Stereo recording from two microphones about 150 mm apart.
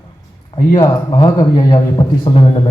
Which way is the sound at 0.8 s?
30° left (ahead or behind).